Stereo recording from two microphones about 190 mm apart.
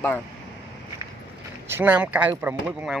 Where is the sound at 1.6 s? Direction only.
10° right (ahead or behind).